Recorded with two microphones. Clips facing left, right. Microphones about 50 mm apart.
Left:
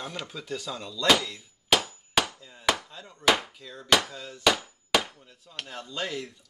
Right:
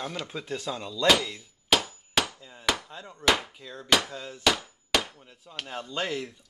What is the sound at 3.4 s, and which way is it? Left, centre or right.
Speech, centre.